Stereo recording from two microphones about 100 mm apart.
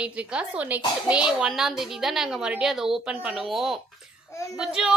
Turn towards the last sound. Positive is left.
turn(degrees=-5)  # may be behind; listen again after turning